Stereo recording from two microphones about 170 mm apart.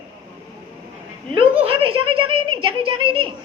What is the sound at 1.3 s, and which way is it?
A woman's voice, 30° right (ahead or behind).